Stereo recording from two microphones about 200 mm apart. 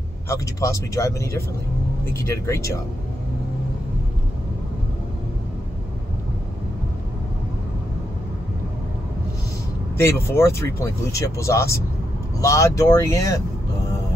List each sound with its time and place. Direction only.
0.3 s speech: 15° left (ahead or behind)
9.9 s speech: 10° left (ahead or behind)